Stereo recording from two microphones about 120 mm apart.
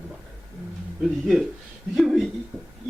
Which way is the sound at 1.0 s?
Centre (ahead or behind).